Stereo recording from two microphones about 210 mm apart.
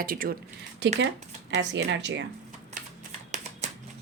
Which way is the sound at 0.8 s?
55° right (ahead or behind).